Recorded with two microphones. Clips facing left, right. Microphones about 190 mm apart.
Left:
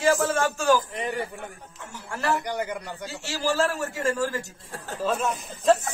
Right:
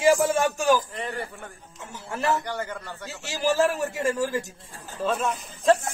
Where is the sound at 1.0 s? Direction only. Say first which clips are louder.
Left 3 dB; 15° left (ahead or behind).